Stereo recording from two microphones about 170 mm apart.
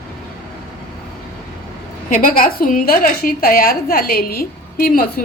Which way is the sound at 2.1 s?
55° left (ahead or behind).